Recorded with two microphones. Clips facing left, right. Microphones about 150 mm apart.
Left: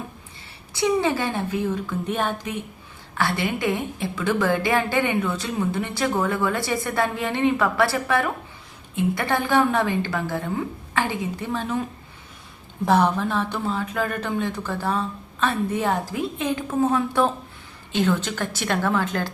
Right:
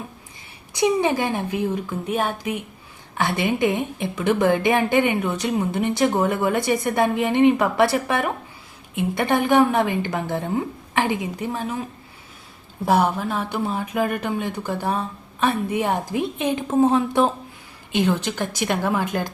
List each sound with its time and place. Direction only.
0.7 s a woman's voice: 20° right (ahead or behind)
12.8 s a woman's voice: 10° right (ahead or behind)